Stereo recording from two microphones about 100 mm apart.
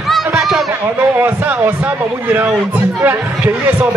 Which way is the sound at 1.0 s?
20° right (ahead or behind).